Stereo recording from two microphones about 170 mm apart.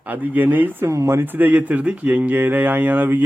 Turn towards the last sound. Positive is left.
turn(degrees=-10)  # may be behind; listen again after turning